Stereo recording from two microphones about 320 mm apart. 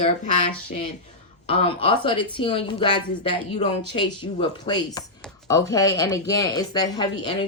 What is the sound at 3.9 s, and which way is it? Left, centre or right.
Speech, centre.